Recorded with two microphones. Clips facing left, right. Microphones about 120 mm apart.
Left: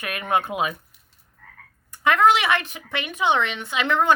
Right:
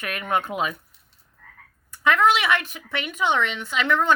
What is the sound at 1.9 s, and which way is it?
A woman's voice, 20° left (ahead or behind).